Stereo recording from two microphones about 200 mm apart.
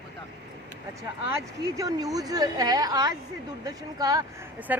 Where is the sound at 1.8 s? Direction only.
20° right (ahead or behind).